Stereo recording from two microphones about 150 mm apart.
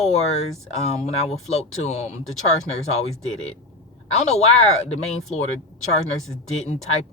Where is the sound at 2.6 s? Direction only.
45° left (ahead or behind).